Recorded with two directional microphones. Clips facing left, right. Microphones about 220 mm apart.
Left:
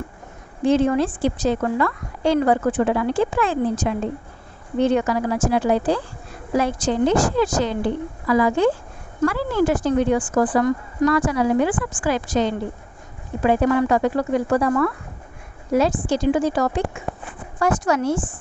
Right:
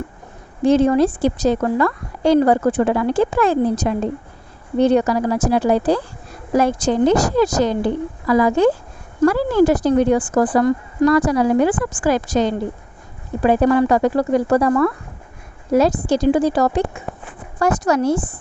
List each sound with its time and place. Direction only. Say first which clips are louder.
0.7 s a woman's voice: right 4 dB; 40° right (ahead or behind)